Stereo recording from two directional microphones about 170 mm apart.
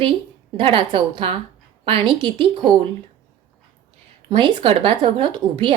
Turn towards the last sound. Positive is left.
turn(degrees=-30)  # may be behind; listen again after turning